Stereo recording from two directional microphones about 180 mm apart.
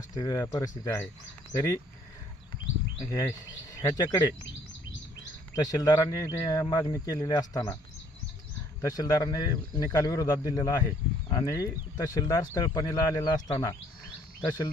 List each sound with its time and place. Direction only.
0.2 s speech: 20° left (ahead or behind)
3.1 s speech: 20° left (ahead or behind)
5.5 s speech: 20° left (ahead or behind)
8.8 s speech: 20° left (ahead or behind)